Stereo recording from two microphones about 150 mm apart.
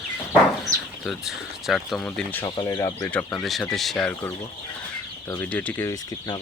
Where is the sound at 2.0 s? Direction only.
10° left (ahead or behind).